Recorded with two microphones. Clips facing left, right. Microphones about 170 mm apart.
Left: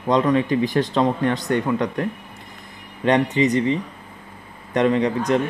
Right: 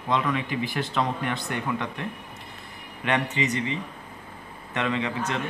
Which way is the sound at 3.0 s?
35° left (ahead or behind).